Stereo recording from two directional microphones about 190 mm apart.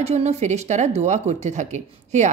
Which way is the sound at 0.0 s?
35° right (ahead or behind).